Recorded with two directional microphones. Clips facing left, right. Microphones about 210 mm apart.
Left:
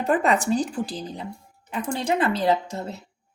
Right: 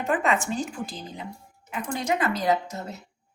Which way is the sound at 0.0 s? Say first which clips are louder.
Left 4 dB; 35° left (ahead or behind).